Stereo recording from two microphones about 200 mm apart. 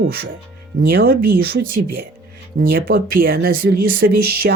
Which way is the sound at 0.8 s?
45° right (ahead or behind).